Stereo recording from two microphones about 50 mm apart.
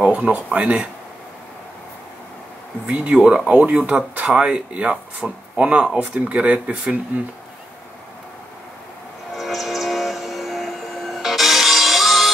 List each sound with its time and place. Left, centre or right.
0.0 s speech: right
2.9 s speech: centre
3.5 s speech: right
9.3 s music: centre